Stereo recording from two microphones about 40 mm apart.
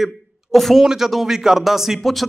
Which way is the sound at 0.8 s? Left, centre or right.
Centre.